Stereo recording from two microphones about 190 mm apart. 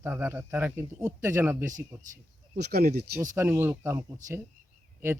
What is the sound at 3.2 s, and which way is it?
Speech, 15° right (ahead or behind).